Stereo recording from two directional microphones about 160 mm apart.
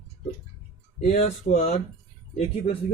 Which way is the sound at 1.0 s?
40° left (ahead or behind).